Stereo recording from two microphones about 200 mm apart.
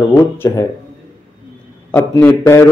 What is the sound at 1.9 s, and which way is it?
Speech, 10° left (ahead or behind).